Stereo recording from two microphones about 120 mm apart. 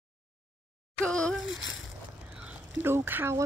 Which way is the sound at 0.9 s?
10° left (ahead or behind).